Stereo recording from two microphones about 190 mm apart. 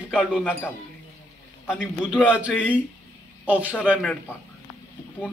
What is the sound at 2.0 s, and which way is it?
A man's voice, 5° right (ahead or behind).